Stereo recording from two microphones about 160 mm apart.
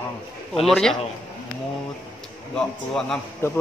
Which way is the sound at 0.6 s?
5° left (ahead or behind).